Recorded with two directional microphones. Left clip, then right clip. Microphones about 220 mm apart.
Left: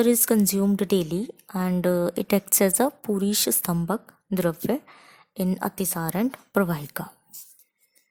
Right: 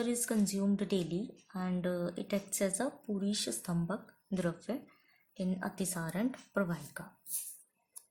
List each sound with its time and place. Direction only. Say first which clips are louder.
0.0 s a woman's voice: left 14 dB; 40° left (ahead or behind)